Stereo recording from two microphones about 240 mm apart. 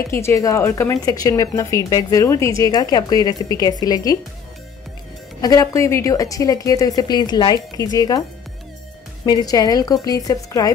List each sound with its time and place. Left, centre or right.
0.1 s speech: centre
5.4 s speech: centre
9.2 s speech: centre